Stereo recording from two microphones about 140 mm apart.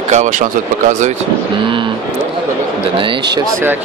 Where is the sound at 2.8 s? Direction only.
40° right (ahead or behind).